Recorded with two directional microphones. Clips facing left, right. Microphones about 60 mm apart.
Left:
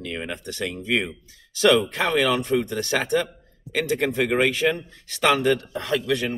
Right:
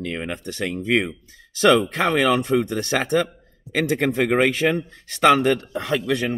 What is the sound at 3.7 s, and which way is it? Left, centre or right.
Speech, right.